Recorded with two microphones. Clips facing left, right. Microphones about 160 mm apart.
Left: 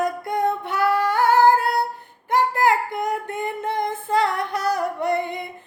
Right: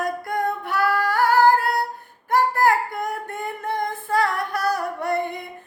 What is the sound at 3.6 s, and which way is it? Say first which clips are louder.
Female singing: right 1 dB; 20° left (ahead or behind).